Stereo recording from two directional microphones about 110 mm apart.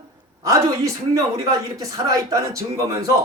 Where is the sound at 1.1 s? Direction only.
30° right (ahead or behind).